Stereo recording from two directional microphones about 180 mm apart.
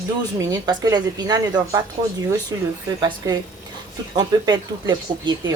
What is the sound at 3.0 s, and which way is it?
Speech, 25° right (ahead or behind).